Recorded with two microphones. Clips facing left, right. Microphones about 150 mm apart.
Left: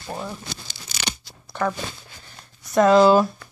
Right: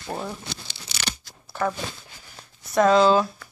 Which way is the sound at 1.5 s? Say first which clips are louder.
Left 1 dB; 5° right (ahead or behind).